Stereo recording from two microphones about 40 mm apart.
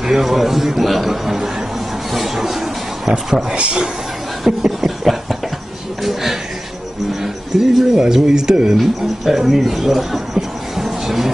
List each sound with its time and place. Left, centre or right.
0.0 s a man's voice: centre
2.1 s a sound: centre
3.5 s a man's voice: centre
4.5 s a sound: centre
7.6 s a man's voice: centre
8.7 s speech: centre